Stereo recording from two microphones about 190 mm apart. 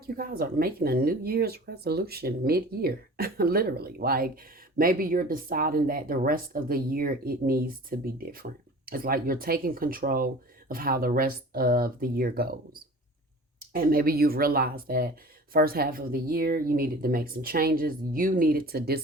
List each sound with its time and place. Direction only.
0.2 s speech: 50° right (ahead or behind)